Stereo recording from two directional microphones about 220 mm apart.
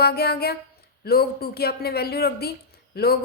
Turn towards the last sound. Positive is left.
turn(degrees=45)  # may be behind; listen again after turning